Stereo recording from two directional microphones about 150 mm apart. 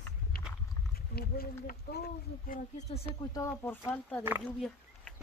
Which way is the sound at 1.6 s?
80° left.